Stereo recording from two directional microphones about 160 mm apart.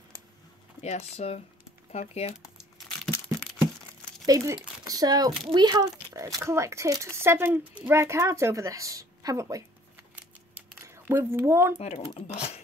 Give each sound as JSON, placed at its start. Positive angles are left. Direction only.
{"t": 0.8, "sound": "speech", "side_deg": 45}
{"t": 2.3, "sound": "crumpling", "side_deg": 0}
{"t": 4.3, "sound": "a child's voice", "side_deg": -20}
{"t": 10.9, "sound": "a woman's voice", "side_deg": -15}
{"t": 11.8, "sound": "speech", "side_deg": 45}